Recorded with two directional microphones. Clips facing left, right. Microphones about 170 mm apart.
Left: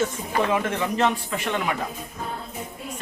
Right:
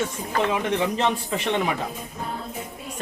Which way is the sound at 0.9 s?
20° right (ahead or behind).